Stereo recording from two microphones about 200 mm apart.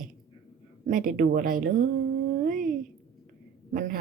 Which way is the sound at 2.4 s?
40° right (ahead or behind).